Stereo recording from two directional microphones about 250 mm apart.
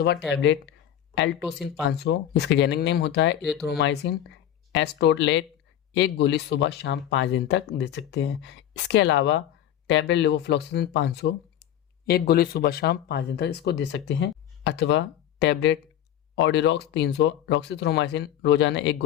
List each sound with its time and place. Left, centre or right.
0.3 s speech: left
1.9 s speech: left